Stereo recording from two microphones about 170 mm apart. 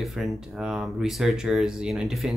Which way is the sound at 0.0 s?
Centre (ahead or behind).